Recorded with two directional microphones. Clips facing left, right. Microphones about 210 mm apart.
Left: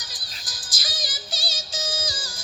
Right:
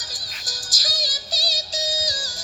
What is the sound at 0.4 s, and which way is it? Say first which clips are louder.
Music: right 4 dB; 45° right (ahead or behind).